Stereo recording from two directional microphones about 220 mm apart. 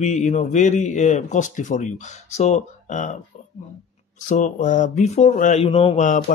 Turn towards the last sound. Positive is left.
turn(degrees=35)  # may be behind; listen again after turning